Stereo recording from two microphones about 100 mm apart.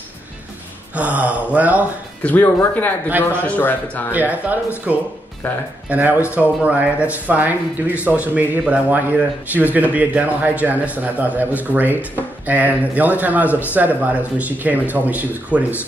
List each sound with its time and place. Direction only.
0.9 s a man's voice: 15° right (ahead or behind)
2.2 s speech: 15° left (ahead or behind)
4.1 s a man's voice: 15° right (ahead or behind)
5.4 s speech: 15° left (ahead or behind)
5.9 s a man's voice: 15° right (ahead or behind)